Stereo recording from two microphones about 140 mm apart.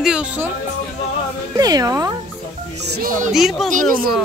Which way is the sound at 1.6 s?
25° right (ahead or behind).